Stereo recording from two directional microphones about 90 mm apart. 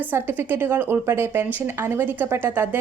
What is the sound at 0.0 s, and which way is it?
A woman's voice, 25° right (ahead or behind).